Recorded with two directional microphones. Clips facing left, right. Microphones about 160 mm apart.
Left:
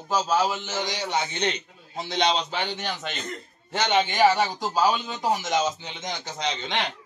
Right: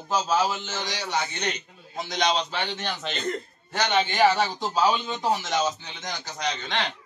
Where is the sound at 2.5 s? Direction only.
10° left (ahead or behind).